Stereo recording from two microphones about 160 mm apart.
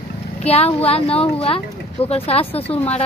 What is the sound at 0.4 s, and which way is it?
Speech, 40° left (ahead or behind).